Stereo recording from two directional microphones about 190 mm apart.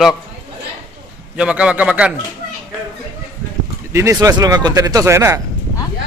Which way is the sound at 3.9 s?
15° right (ahead or behind).